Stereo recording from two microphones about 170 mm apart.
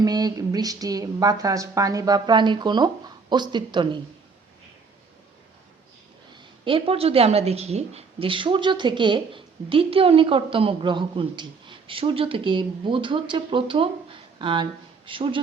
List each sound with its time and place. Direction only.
0.0 s a woman's voice: 25° right (ahead or behind)
6.3 s a woman's voice: 30° right (ahead or behind)